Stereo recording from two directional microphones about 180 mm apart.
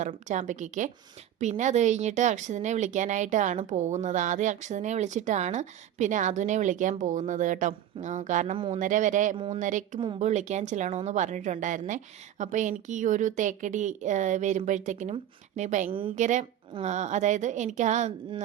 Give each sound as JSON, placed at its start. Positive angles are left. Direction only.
{"t": 0.0, "sound": "a woman's voice", "side_deg": -45}
{"t": 8.5, "sound": "speech", "side_deg": -30}
{"t": 8.8, "sound": "a woman's voice", "side_deg": -45}
{"t": 15.9, "sound": "speech", "side_deg": -30}
{"t": 16.1, "sound": "a woman's voice", "side_deg": -40}